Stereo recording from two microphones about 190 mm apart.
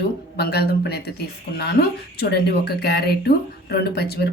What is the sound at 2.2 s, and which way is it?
Speech, 60° left (ahead or behind).